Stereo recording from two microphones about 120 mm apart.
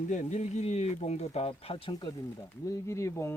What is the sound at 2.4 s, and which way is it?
Speech, 25° left (ahead or behind).